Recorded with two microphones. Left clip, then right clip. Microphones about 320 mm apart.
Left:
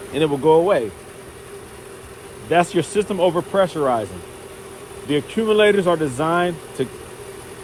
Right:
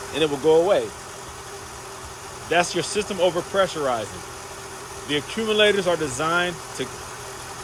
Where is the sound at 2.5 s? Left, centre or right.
Left.